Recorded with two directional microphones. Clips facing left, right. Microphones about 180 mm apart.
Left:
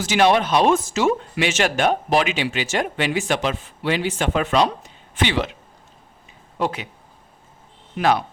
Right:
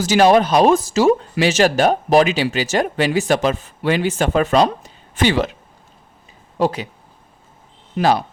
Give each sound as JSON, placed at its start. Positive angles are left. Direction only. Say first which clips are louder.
{"t": 0.0, "sound": "speech", "louder": "right 5 dB", "side_deg": -40}
{"t": 6.6, "sound": "speech", "louder": "right 5 dB", "side_deg": -35}
{"t": 7.9, "sound": "speech", "louder": "right 3 dB", "side_deg": -35}